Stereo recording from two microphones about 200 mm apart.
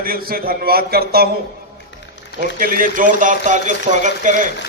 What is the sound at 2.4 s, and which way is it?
Speech, 45° right (ahead or behind).